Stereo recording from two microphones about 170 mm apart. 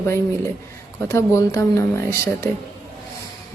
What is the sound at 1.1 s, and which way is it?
Speech, 20° left (ahead or behind).